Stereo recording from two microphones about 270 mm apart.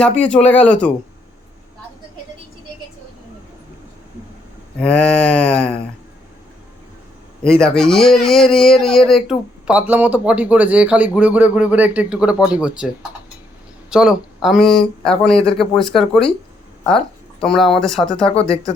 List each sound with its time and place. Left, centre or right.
0.2 s speech: centre
4.8 s speech: centre
7.4 s speech: centre
17.4 s speech: centre
18.3 s speech: left